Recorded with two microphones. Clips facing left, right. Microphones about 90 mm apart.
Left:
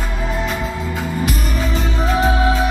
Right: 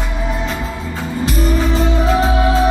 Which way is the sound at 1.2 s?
35° right (ahead or behind).